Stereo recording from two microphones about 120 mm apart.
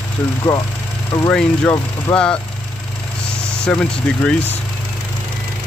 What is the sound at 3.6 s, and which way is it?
Speech, 10° left (ahead or behind).